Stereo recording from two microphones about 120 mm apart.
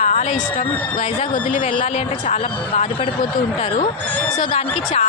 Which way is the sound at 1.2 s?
90° left.